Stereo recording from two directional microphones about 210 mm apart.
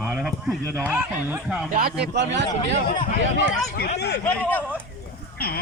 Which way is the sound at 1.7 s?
45° right (ahead or behind).